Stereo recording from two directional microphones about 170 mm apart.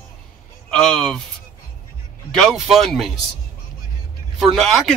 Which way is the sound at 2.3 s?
Centre (ahead or behind).